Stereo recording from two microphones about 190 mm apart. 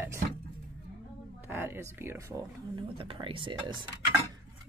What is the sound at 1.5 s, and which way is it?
Speech, 10° right (ahead or behind).